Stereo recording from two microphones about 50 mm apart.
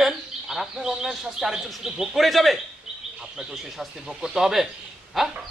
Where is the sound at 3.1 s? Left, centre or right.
Centre.